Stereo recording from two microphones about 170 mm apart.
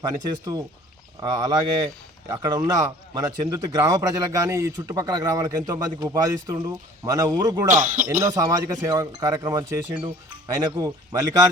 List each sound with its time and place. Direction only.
0.3 s speech: 20° right (ahead or behind)
7.7 s speech: 50° right (ahead or behind)
8.2 s speech: 20° right (ahead or behind)